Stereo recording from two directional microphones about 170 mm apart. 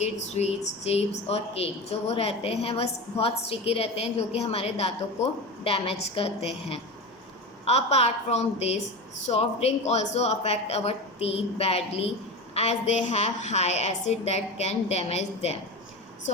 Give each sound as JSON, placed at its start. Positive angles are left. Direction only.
{"t": 0.9, "sound": "a woman's voice", "side_deg": 35}